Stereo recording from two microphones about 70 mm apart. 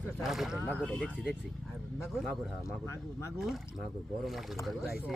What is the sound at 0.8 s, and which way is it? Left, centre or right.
Speech, centre.